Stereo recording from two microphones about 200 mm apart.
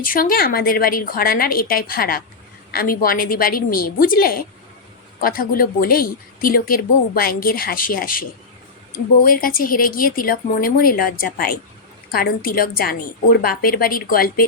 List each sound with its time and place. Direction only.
0.0 s speech: 45° left (ahead or behind)
9.2 s speech: 45° left (ahead or behind)